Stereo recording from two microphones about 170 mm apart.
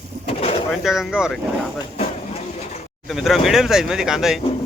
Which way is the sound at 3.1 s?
Centre (ahead or behind).